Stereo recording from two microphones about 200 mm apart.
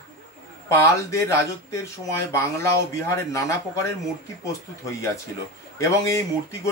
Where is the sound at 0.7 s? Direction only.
15° left (ahead or behind).